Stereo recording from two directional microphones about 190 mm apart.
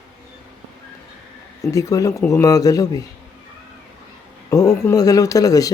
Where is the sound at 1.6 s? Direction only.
15° left (ahead or behind).